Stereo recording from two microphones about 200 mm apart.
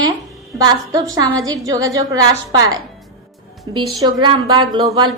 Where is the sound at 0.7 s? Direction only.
15° right (ahead or behind).